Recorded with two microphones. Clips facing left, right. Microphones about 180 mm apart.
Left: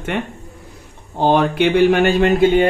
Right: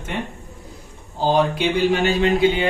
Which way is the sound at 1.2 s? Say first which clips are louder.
Left 4 dB; 60° left (ahead or behind).